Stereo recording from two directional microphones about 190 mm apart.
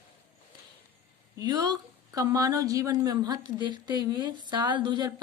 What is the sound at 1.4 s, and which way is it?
A woman's voice, 20° right (ahead or behind).